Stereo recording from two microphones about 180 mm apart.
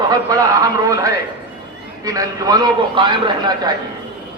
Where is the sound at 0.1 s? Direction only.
20° right (ahead or behind).